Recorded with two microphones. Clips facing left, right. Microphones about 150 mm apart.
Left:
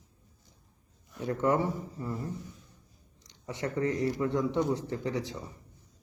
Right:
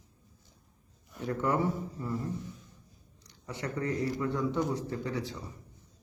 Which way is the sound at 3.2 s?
20° left (ahead or behind).